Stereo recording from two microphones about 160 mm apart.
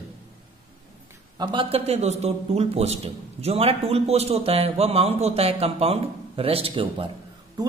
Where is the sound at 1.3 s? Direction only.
25° right (ahead or behind).